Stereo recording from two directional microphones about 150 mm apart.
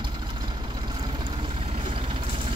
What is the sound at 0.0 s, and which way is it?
Vehicle, 30° right (ahead or behind).